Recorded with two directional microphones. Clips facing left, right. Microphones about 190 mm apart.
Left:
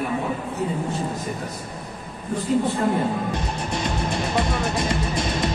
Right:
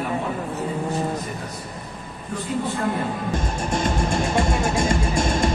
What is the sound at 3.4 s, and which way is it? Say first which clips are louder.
Speech: right 3 dB; 50° right (ahead or behind).